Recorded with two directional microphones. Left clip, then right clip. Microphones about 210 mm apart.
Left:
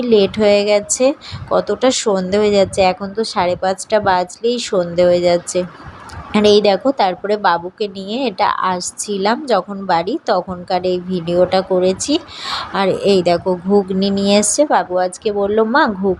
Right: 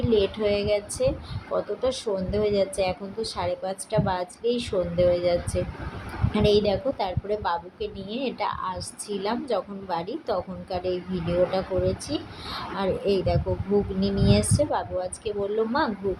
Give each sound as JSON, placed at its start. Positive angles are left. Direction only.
{"t": 0.0, "sound": "a woman's voice", "side_deg": 25}